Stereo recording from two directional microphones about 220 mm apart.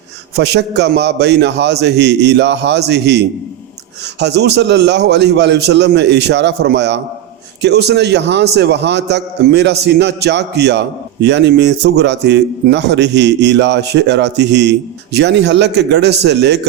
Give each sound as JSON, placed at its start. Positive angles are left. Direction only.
{"t": 0.3, "sound": "a man's voice", "side_deg": -50}